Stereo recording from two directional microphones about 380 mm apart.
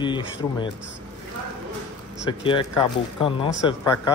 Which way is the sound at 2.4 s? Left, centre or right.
Centre.